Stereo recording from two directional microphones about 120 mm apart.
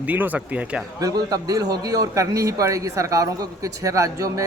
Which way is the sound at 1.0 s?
30° right (ahead or behind).